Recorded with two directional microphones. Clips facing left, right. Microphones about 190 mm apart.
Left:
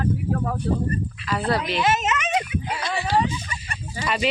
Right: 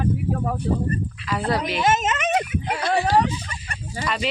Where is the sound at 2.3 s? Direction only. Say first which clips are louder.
Right 2 dB; 55° right (ahead or behind).